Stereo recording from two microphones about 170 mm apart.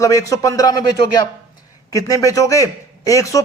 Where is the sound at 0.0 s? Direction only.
20° left (ahead or behind).